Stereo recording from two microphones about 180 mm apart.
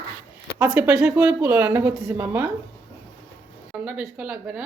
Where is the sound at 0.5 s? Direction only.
10° right (ahead or behind).